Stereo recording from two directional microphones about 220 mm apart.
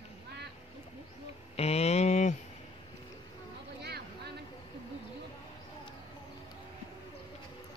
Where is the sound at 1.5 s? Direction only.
30° left (ahead or behind).